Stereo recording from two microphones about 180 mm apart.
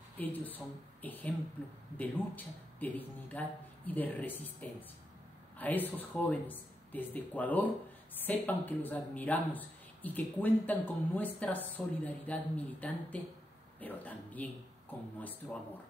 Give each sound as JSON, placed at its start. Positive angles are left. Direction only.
{"t": 0.2, "sound": "a man's voice", "side_deg": 10}